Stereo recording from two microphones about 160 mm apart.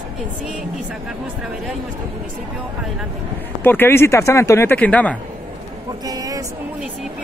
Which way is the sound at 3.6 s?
15° left (ahead or behind).